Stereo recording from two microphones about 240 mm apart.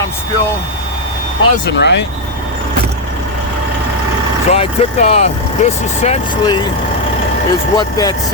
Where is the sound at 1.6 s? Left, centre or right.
Left.